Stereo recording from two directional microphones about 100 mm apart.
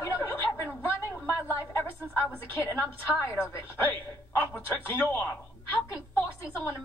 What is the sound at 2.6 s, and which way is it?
A woman's voice, 20° left (ahead or behind).